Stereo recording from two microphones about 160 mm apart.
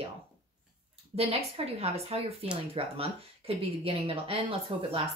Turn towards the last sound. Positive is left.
turn(degrees=-35)  # may be behind; listen again after turning